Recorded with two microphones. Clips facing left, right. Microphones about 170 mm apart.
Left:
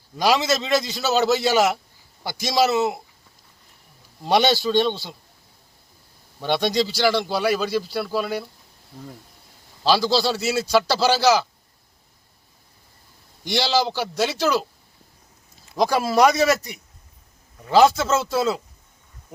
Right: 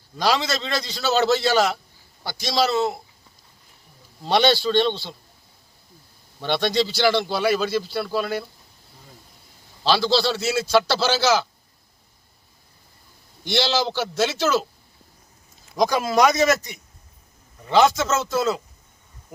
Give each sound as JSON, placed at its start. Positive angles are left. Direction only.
{"t": 0.2, "sound": "a man's voice", "side_deg": 15}
{"t": 1.4, "sound": "a man's voice", "side_deg": 15}
{"t": 4.2, "sound": "a man's voice", "side_deg": 5}
{"t": 6.4, "sound": "a man's voice", "side_deg": 5}
{"t": 9.8, "sound": "a man's voice", "side_deg": 5}
{"t": 13.5, "sound": "a man's voice", "side_deg": 10}
{"t": 15.7, "sound": "a man's voice", "side_deg": 5}
{"t": 16.4, "sound": "speech", "side_deg": 35}
{"t": 17.9, "sound": "speech", "side_deg": 30}
{"t": 18.3, "sound": "a man's voice", "side_deg": 5}